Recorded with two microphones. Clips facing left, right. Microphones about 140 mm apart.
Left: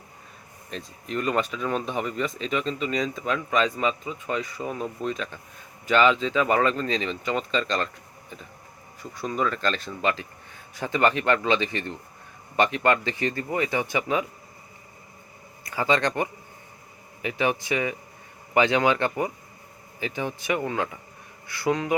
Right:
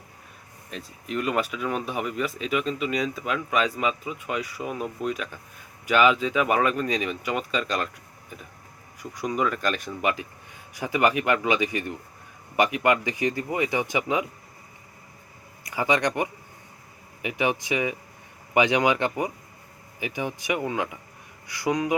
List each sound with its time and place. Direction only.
0.7 s speech: 5° right (ahead or behind)
9.0 s speech: 15° right (ahead or behind)
15.6 s speech: 15° right (ahead or behind)